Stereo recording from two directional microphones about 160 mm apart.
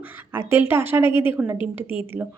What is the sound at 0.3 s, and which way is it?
A woman's voice, 15° right (ahead or behind).